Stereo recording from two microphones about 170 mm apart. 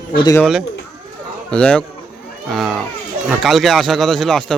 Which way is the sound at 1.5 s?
5° left (ahead or behind).